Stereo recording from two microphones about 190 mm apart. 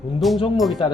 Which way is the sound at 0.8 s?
25° left (ahead or behind).